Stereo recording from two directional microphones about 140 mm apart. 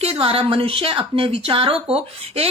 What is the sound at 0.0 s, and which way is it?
A woman's voice, 45° right (ahead or behind).